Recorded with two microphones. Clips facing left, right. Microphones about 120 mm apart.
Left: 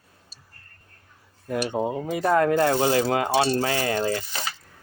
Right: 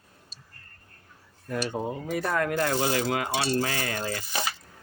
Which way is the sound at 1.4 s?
20° left (ahead or behind).